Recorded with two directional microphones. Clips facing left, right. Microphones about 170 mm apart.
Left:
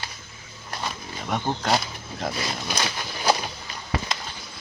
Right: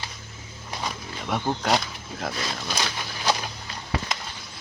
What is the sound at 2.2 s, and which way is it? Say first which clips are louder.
Speech: left 2 dB; 5° left (ahead or behind).